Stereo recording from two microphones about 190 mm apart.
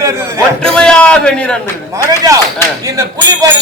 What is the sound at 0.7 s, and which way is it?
Speech, 5° left (ahead or behind).